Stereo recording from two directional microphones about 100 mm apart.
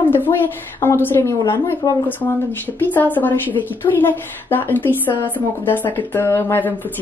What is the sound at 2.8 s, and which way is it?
A woman's voice, 20° left (ahead or behind).